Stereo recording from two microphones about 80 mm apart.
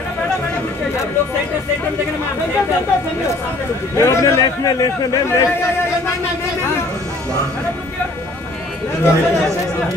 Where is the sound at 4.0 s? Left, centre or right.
Left.